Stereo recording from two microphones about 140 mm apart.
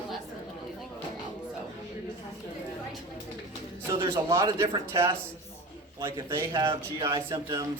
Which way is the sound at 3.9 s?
20° right (ahead or behind).